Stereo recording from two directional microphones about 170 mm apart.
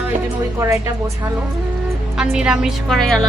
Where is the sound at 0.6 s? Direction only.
15° right (ahead or behind).